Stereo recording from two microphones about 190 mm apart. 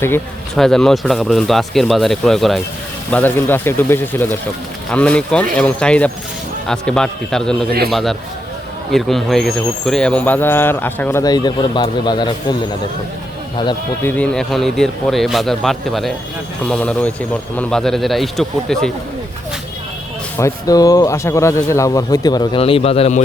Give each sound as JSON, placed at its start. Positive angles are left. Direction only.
{"t": 0.0, "sound": "speech", "side_deg": 5}
{"t": 14.0, "sound": "speech", "side_deg": 10}
{"t": 20.4, "sound": "speech", "side_deg": 20}